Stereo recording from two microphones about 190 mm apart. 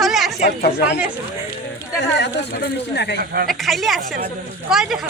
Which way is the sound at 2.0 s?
65° left (ahead or behind).